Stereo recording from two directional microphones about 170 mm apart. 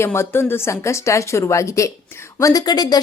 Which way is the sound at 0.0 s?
15° left (ahead or behind).